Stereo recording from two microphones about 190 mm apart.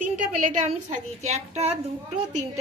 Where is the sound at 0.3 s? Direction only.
35° right (ahead or behind).